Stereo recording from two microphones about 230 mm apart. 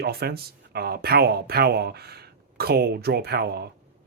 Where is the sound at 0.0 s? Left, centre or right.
Right.